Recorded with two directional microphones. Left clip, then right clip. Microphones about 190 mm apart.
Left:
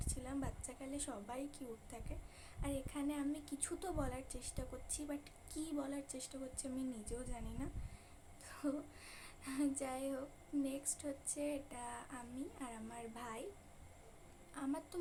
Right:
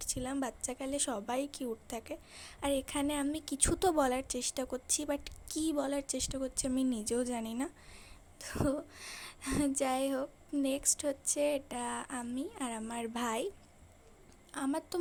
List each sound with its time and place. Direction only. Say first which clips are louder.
0.0 s a woman's voice: right 9 dB; 50° right (ahead or behind)
14.5 s a woman's voice: right 8 dB; 50° right (ahead or behind)